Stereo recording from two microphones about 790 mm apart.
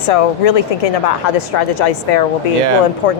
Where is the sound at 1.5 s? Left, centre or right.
Left.